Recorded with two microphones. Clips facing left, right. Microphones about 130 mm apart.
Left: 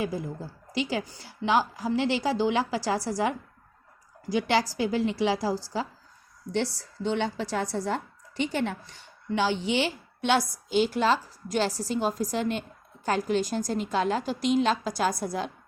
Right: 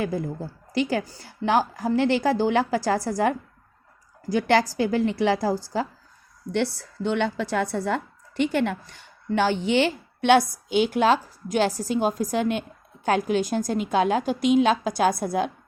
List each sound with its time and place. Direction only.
0.0 s a woman's voice: 55° right (ahead or behind)
1.0 s a woman's voice: 40° right (ahead or behind)
1.5 s a woman's voice: 50° right (ahead or behind)